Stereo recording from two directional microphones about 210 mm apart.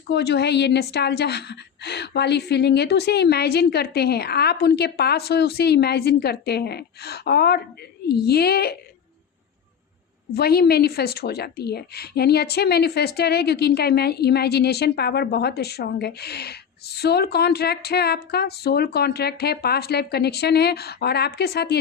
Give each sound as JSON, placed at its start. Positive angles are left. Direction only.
{"t": 0.1, "sound": "a woman's voice", "side_deg": 50}
{"t": 10.3, "sound": "a woman's voice", "side_deg": 50}